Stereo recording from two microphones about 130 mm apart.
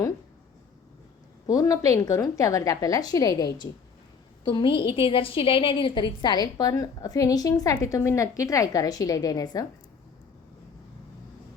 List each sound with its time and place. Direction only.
1.5 s a woman's voice: 25° left (ahead or behind)